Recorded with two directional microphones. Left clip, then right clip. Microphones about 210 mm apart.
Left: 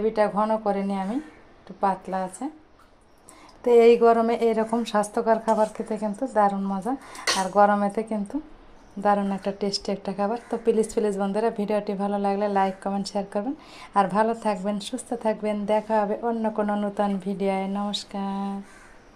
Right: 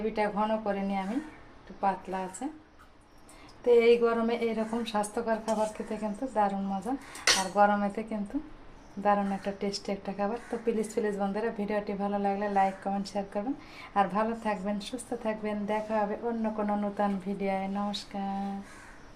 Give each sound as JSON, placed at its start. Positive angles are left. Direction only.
{"t": 0.1, "sound": "a woman's voice", "side_deg": 35}
{"t": 2.4, "sound": "a woman's voice", "side_deg": 35}
{"t": 3.6, "sound": "a woman's voice", "side_deg": 40}